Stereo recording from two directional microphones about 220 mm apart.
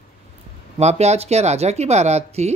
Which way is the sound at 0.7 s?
30° right (ahead or behind).